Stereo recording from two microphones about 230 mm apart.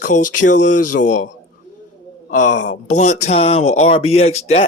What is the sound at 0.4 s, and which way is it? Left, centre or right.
Speech, left.